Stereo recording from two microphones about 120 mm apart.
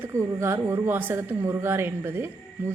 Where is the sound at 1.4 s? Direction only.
25° right (ahead or behind).